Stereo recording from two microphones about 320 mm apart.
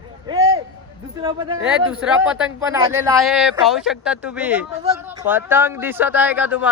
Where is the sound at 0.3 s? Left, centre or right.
Centre.